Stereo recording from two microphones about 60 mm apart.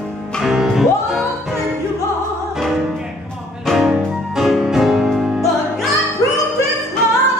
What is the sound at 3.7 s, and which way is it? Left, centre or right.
Music, centre.